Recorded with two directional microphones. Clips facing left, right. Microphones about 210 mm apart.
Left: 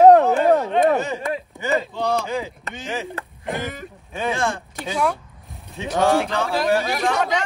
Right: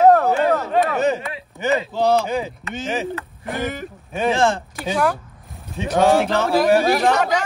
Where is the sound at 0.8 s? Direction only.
Centre (ahead or behind).